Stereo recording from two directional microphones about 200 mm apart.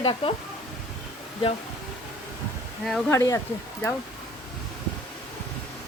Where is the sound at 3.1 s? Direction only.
15° left (ahead or behind).